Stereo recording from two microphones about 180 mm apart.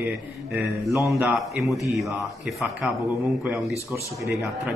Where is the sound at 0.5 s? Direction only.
Centre (ahead or behind).